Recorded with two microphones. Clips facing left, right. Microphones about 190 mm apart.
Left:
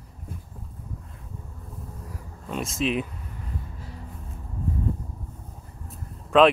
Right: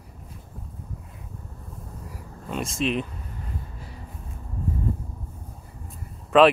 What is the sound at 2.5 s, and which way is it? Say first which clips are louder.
Speech: even; centre (ahead or behind).